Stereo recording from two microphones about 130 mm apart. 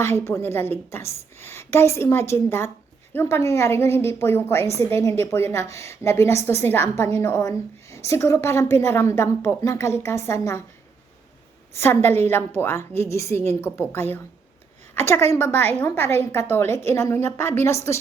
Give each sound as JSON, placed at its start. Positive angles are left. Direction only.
{"t": 0.0, "sound": "a woman's voice", "side_deg": 20}
{"t": 11.7, "sound": "a woman's voice", "side_deg": 20}